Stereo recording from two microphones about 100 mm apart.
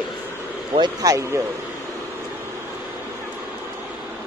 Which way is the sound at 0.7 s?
45° right (ahead or behind).